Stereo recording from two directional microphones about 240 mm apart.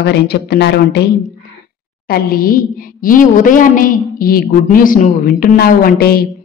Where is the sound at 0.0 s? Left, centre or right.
Left.